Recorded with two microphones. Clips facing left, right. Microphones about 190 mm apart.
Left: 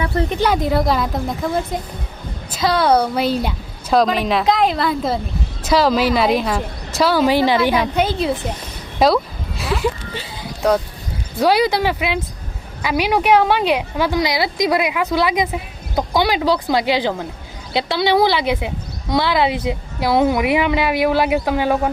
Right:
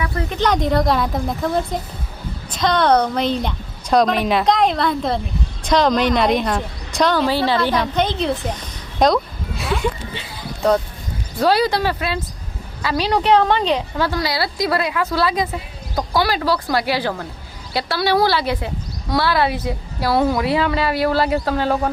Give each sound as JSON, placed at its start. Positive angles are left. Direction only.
{"t": 0.0, "sound": "speech", "side_deg": 30}
{"t": 0.3, "sound": "a woman's voice", "side_deg": 5}
{"t": 9.0, "sound": "sheep", "side_deg": 5}
{"t": 11.3, "sound": "a woman's voice", "side_deg": 15}